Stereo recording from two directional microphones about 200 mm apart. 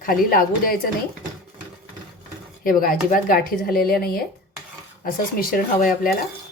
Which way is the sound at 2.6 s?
45° left (ahead or behind).